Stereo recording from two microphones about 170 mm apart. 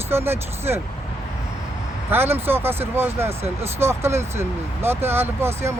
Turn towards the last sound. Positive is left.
turn(degrees=-15)  # may be behind; listen again after turning